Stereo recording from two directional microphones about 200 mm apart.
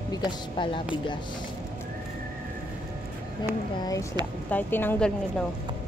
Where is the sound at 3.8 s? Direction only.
15° left (ahead or behind).